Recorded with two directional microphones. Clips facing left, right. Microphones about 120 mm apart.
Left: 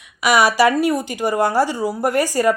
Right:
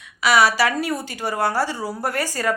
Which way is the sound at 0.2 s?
15° left (ahead or behind).